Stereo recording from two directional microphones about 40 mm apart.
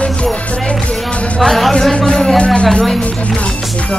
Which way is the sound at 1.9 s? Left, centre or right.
Left.